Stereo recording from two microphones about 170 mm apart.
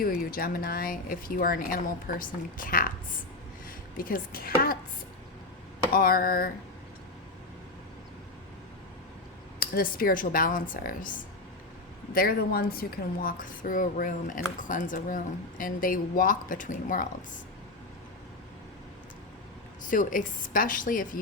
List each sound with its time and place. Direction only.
0.0 s speech: 60° left (ahead or behind)
3.9 s speech: 55° left (ahead or behind)
5.9 s speech: 60° left (ahead or behind)
9.6 s speech: 60° left (ahead or behind)
12.1 s speech: 60° left (ahead or behind)
13.2 s speech: 50° left (ahead or behind)
19.8 s speech: 50° left (ahead or behind)